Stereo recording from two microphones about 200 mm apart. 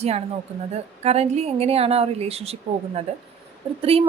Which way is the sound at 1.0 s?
30° right (ahead or behind).